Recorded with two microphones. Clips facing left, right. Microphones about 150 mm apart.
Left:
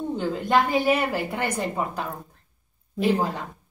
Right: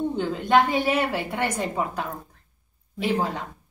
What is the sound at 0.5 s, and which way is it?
Speech, 5° left (ahead or behind).